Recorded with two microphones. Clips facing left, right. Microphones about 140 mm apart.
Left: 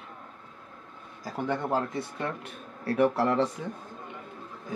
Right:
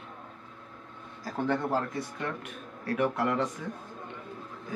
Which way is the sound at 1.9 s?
30° left (ahead or behind).